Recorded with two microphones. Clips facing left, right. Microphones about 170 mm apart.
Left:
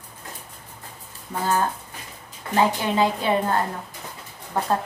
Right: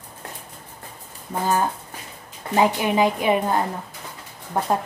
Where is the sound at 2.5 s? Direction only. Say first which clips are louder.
Right 2 dB; 15° right (ahead or behind).